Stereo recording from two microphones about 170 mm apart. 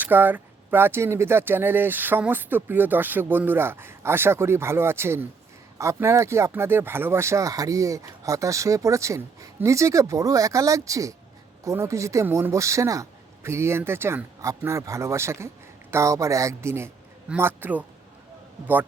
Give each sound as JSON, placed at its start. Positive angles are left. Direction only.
{"t": 0.0, "sound": "speech", "side_deg": -10}